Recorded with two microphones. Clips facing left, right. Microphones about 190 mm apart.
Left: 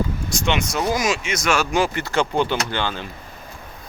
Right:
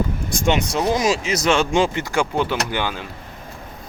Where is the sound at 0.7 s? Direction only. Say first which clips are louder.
Right 2 dB; 30° right (ahead or behind).